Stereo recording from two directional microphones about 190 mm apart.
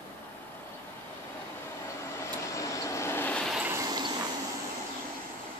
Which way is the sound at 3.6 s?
15° right (ahead or behind).